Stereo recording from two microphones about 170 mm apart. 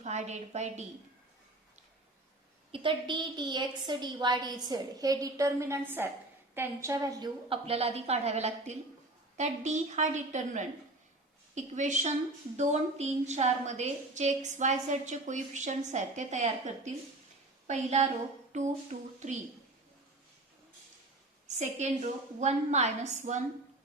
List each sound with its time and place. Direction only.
0.0 s a woman's voice: 40° right (ahead or behind)
2.7 s a woman's voice: 30° right (ahead or behind)
7.5 s a woman's voice: 35° right (ahead or behind)
21.4 s a woman's voice: 40° right (ahead or behind)